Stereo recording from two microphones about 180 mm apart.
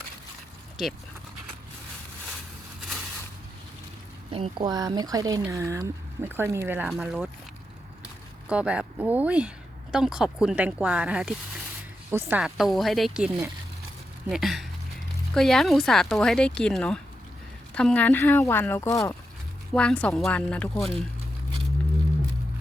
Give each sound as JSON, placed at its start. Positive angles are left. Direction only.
{"t": 4.3, "sound": "speech", "side_deg": -30}
{"t": 6.9, "sound": "a woman's voice", "side_deg": 0}
{"t": 8.4, "sound": "a woman's voice", "side_deg": -5}
{"t": 19.7, "sound": "a woman's voice", "side_deg": 5}